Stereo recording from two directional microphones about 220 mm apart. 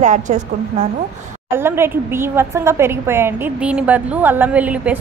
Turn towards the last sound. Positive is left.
turn(degrees=-5)  # may be behind; listen again after turning